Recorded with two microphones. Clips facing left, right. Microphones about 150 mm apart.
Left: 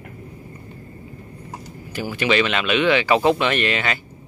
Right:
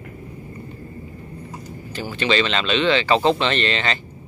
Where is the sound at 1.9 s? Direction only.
10° left (ahead or behind).